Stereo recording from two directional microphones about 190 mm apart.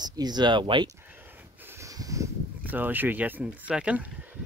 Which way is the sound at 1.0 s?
10° right (ahead or behind).